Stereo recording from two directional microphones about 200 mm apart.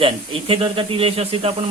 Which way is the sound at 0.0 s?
25° right (ahead or behind).